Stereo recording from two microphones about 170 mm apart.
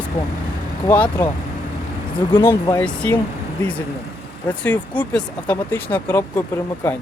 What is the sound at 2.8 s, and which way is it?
Speech, 10° left (ahead or behind).